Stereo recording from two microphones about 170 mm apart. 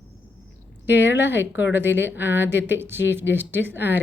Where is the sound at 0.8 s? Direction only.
90° left.